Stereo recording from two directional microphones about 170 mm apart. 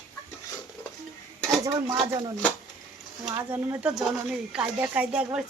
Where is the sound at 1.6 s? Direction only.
20° right (ahead or behind).